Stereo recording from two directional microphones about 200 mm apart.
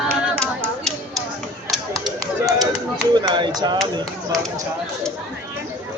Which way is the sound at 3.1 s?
20° right (ahead or behind).